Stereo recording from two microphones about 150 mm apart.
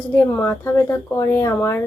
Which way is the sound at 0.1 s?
15° left (ahead or behind).